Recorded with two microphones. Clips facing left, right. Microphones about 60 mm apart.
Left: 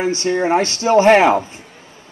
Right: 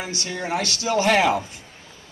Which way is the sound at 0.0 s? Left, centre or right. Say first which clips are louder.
Left 12 dB; left.